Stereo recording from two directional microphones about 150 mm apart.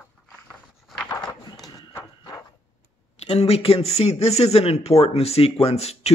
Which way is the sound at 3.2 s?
40° left (ahead or behind).